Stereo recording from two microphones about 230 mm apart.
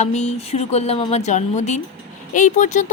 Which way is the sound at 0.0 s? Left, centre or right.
Left.